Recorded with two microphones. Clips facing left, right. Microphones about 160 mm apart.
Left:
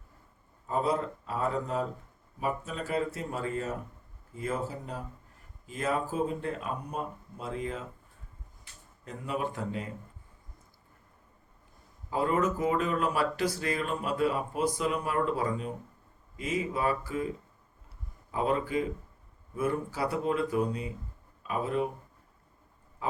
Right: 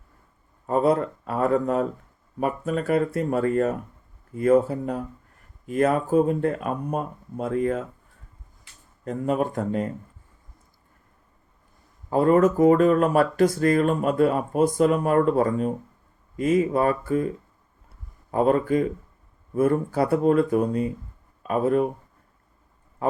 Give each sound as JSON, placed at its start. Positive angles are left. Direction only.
{"t": 0.7, "sound": "speech", "side_deg": -60}
{"t": 9.0, "sound": "speech", "side_deg": -50}
{"t": 12.1, "sound": "speech", "side_deg": -50}
{"t": 18.3, "sound": "speech", "side_deg": -50}